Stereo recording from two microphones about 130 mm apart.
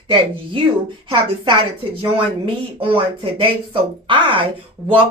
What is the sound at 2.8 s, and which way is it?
Speech, 45° right (ahead or behind).